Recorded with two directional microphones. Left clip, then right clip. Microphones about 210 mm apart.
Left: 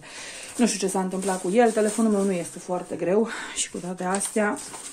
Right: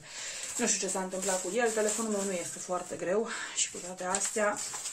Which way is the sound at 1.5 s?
45° left (ahead or behind).